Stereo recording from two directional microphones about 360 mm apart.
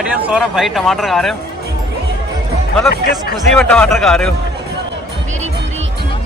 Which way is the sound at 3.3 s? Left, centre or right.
Centre.